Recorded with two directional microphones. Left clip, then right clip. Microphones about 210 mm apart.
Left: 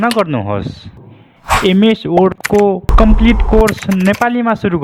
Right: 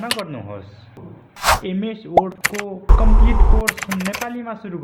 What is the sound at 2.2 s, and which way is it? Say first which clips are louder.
Speech: left 5 dB; centre (ahead or behind).